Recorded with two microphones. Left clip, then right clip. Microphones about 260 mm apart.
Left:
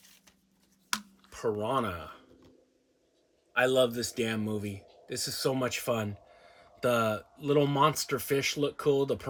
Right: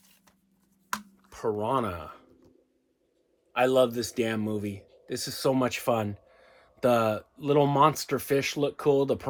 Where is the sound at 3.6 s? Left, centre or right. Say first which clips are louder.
Right 4 dB; centre.